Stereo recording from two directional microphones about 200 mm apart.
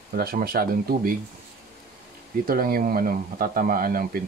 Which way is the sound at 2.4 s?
45° right (ahead or behind).